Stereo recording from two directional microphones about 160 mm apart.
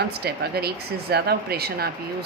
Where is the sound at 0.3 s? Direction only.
80° right.